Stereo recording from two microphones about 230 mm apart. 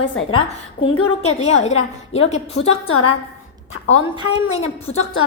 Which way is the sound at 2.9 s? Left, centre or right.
Left.